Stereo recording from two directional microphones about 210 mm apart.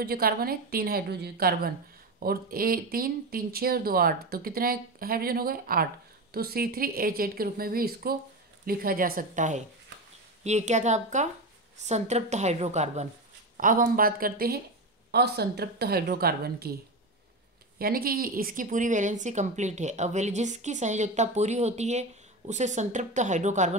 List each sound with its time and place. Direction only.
0.0 s speech: 45° right (ahead or behind)
17.7 s speech: 45° right (ahead or behind)